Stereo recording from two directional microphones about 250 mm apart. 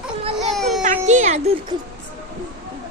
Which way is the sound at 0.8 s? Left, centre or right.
Right.